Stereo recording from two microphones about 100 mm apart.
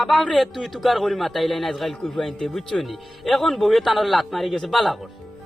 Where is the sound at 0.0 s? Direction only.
Centre (ahead or behind).